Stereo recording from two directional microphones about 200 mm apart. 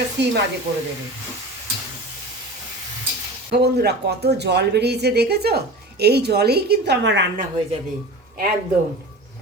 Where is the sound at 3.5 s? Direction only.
55° right (ahead or behind).